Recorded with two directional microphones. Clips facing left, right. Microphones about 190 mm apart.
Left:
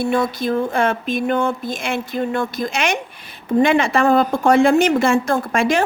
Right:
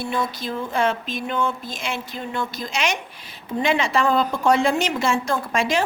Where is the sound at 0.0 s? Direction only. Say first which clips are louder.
Left 7 dB; 55° left (ahead or behind).